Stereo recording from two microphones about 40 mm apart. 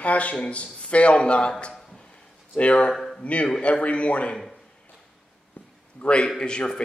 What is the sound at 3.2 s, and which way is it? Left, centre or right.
Speech, left.